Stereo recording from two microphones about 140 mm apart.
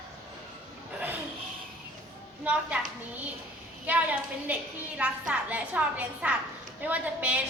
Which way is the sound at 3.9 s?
10° right (ahead or behind).